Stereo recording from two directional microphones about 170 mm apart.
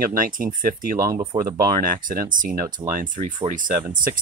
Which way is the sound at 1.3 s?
30° right (ahead or behind).